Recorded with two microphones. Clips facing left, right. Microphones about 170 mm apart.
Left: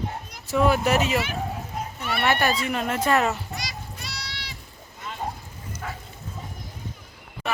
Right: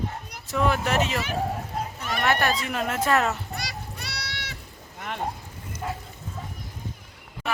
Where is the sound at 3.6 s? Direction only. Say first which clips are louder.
Right 1 dB; 65° right (ahead or behind).